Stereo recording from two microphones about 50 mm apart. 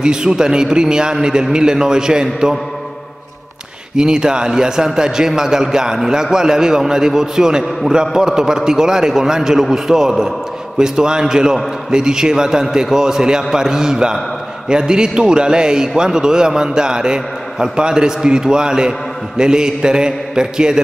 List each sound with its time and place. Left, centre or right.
0.0 s a man's voice: centre
3.9 s a man's voice: centre